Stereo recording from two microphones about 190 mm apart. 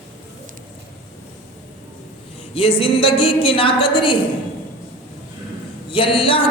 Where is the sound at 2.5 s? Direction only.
30° left (ahead or behind).